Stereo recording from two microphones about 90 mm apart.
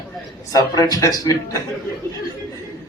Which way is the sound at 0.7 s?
45° left (ahead or behind).